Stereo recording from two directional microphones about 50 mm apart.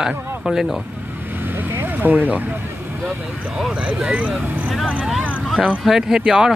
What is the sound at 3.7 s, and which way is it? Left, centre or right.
Speech, centre.